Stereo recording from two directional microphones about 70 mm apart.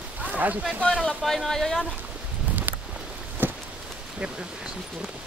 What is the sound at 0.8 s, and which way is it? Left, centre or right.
Speech, centre.